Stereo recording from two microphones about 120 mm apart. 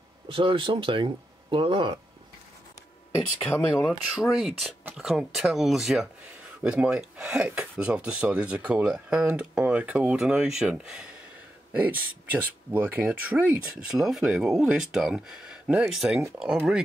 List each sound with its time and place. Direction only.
0.3 s speech: 45° right (ahead or behind)
3.8 s speech: 5° right (ahead or behind)